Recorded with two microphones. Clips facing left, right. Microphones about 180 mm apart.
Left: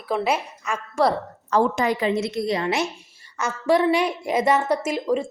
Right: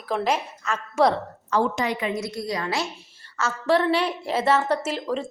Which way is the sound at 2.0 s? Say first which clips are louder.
Left 5 dB; 30° left (ahead or behind).